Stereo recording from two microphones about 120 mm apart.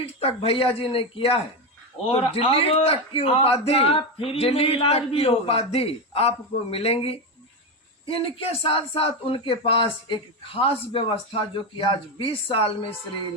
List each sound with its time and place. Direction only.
0.0 s a man's voice: 55° left (ahead or behind)